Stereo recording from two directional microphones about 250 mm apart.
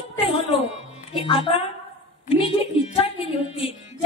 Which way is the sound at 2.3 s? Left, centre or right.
Left.